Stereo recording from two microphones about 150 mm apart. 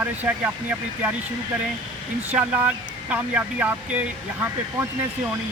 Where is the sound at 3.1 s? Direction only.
10° right (ahead or behind).